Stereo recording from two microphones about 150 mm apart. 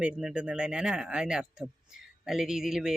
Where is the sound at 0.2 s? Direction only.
5° right (ahead or behind).